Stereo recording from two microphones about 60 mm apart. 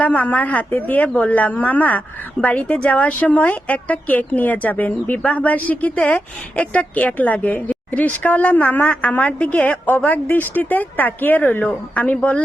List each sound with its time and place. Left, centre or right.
0.0 s speech: left